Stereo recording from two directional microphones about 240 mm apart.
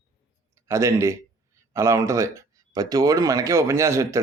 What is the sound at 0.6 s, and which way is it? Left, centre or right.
A man's voice, centre.